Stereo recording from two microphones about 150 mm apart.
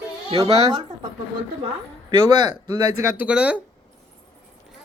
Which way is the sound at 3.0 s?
15° right (ahead or behind).